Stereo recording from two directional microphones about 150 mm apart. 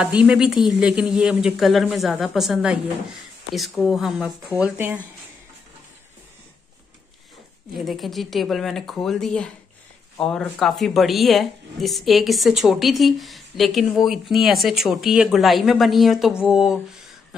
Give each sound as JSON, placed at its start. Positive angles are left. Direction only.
{"t": 0.0, "sound": "speech", "side_deg": -5}
{"t": 7.7, "sound": "speech", "side_deg": 0}